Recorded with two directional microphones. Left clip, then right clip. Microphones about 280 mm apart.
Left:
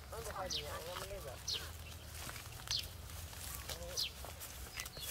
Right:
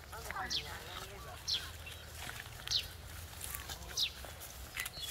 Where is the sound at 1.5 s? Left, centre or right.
Left.